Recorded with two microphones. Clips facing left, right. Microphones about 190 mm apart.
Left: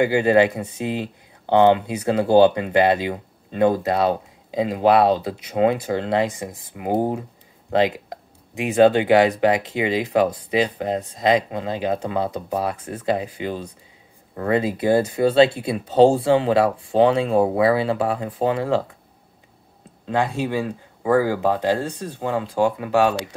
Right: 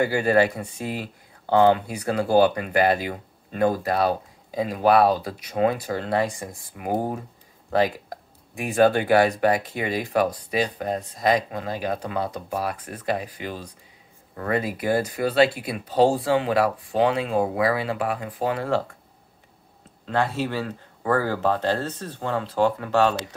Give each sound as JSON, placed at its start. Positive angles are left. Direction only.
{"t": 0.0, "sound": "speech", "side_deg": 20}
{"t": 20.1, "sound": "speech", "side_deg": 15}